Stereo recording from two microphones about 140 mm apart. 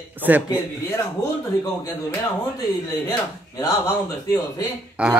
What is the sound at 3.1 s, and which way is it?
Speech, 25° left (ahead or behind).